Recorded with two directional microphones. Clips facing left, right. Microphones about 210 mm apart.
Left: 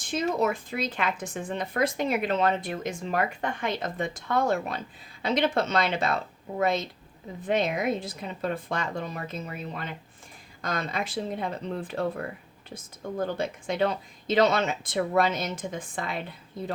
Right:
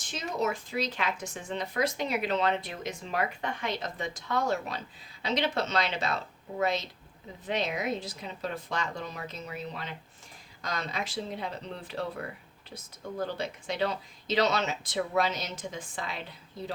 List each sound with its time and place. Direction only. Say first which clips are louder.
0.1 s a woman's voice: left 5 dB; 55° left (ahead or behind)